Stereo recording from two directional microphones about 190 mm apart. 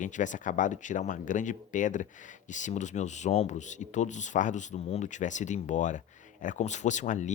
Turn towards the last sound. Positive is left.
turn(degrees=40)  # may be behind; listen again after turning